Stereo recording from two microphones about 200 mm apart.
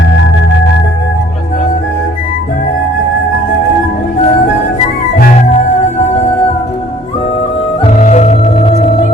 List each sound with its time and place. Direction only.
5.1 s music: 45° left (ahead or behind)
7.9 s organ: 35° left (ahead or behind)